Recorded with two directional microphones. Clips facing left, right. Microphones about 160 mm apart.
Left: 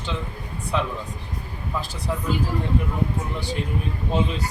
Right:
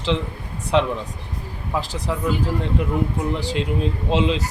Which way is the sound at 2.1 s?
85° right.